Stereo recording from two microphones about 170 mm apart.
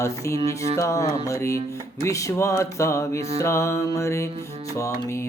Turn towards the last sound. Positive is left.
turn(degrees=15)  # may be behind; listen again after turning